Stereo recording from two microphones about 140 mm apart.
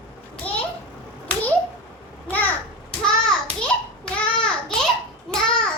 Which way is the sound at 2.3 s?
10° left (ahead or behind).